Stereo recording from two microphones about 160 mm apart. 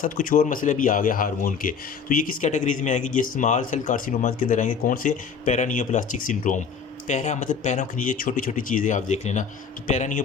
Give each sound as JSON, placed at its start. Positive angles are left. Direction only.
{"t": 0.0, "sound": "speech", "side_deg": 55}